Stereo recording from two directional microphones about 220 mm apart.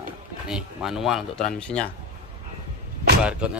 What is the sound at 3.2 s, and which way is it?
Speech, 5° right (ahead or behind).